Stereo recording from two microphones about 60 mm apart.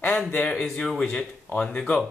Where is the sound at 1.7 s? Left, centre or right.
Centre.